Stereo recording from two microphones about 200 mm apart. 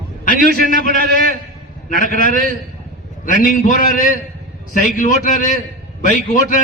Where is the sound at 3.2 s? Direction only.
40° left (ahead or behind).